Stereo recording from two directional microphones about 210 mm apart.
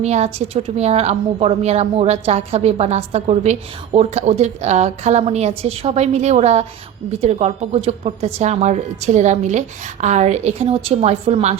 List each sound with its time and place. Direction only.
0.0 s a woman's voice: 30° right (ahead or behind)